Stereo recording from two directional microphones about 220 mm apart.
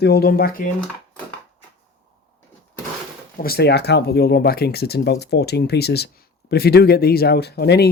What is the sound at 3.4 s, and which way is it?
Speech, 45° left (ahead or behind).